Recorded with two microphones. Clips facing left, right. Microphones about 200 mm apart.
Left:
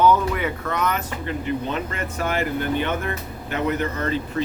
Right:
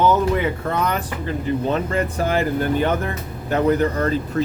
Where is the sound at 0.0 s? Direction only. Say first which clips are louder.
Right 1 dB; 25° right (ahead or behind).